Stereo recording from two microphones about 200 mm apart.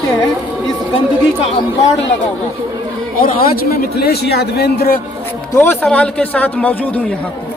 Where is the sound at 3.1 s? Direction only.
45° left (ahead or behind).